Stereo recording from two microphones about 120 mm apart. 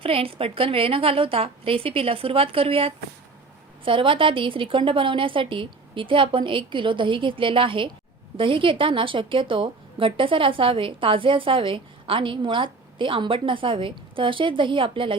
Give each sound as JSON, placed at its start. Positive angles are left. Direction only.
{"t": 0.0, "sound": "a woman's voice", "side_deg": -50}